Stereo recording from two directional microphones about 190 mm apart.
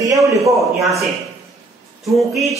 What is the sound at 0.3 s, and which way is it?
Speech, 15° right (ahead or behind).